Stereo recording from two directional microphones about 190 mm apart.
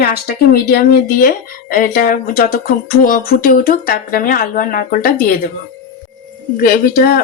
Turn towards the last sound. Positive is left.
turn(degrees=50)  # may be behind; listen again after turning